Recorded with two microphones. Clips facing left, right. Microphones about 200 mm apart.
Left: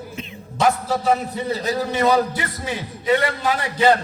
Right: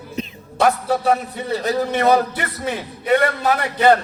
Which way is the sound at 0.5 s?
60° right (ahead or behind).